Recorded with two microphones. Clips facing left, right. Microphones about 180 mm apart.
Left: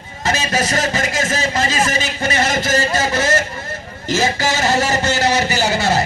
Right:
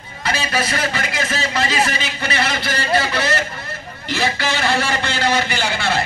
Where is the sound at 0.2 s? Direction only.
45° left (ahead or behind).